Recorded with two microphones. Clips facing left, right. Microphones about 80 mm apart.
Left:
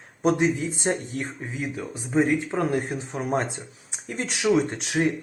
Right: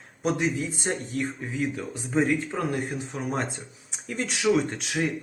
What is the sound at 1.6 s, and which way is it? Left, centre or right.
Speech, centre.